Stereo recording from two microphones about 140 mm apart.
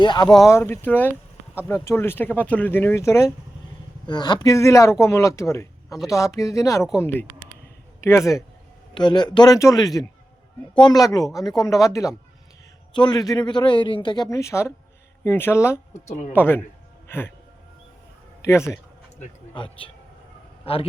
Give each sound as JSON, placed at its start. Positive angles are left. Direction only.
{"t": 0.0, "sound": "a man's voice", "side_deg": 30}
{"t": 0.4, "sound": "speech", "side_deg": 20}
{"t": 4.0, "sound": "speech", "side_deg": 30}
{"t": 9.0, "sound": "speech", "side_deg": 30}
{"t": 12.9, "sound": "a man's voice", "side_deg": 35}
{"t": 18.4, "sound": "speech", "side_deg": 20}
{"t": 19.5, "sound": "a man's voice", "side_deg": 40}